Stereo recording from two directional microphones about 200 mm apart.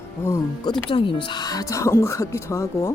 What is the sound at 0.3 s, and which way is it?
Speech, 20° left (ahead or behind).